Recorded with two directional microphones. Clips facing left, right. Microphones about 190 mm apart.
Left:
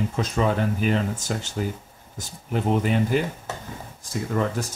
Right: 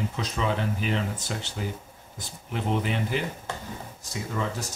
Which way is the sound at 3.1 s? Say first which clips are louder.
Left 4 dB; 45° left (ahead or behind).